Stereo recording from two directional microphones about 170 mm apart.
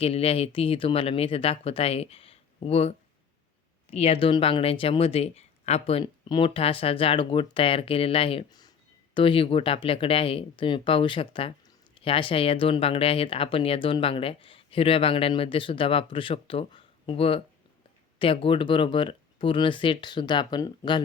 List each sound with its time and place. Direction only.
0.0 s speech: 35° left (ahead or behind)